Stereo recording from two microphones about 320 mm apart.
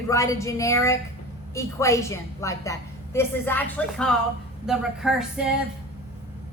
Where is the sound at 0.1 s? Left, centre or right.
Centre.